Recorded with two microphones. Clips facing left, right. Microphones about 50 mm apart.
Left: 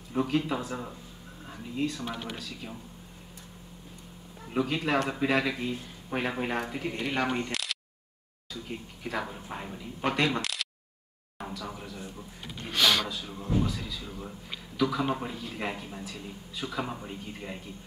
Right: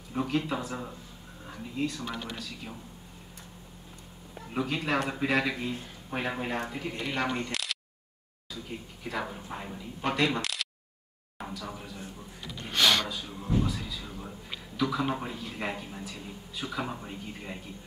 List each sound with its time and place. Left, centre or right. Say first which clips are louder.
0.1 s speech: left 2 dB; centre
2.0 s speech: left 1 dB; left
4.6 s speech: left 2 dB; centre
7.3 s single-lens reflex camera: left 1 dB; centre
9.0 s a man's voice: even; centre